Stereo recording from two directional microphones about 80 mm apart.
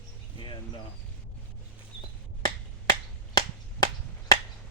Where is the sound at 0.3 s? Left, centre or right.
Left.